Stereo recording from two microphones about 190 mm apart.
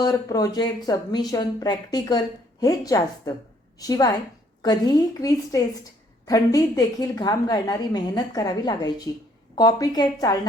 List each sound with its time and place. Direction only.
0.0 s speech: 20° left (ahead or behind)